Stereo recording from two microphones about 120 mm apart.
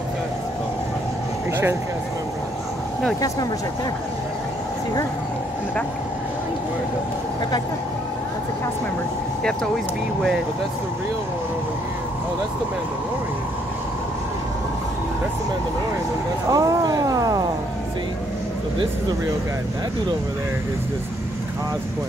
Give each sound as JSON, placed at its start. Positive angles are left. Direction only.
{"t": 16.4, "sound": "speech", "side_deg": -30}